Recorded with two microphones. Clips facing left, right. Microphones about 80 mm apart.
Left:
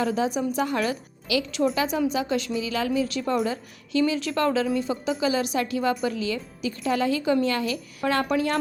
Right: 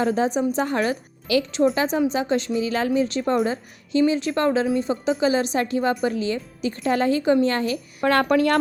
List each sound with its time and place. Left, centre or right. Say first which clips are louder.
0.0 s a woman's voice: right 4 dB; right
8.1 s speech: right 5 dB; right